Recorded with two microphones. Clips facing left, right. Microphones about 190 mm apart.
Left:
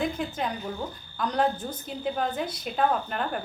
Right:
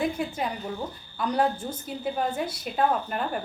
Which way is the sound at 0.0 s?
5° right (ahead or behind).